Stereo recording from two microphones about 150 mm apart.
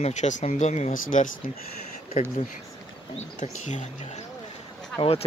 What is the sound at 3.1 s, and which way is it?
Speech, 50° left (ahead or behind).